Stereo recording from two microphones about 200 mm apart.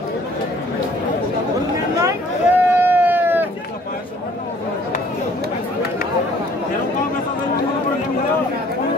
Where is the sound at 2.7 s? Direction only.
10° right (ahead or behind).